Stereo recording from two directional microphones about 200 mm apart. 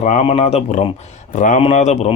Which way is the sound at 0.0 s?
35° left (ahead or behind).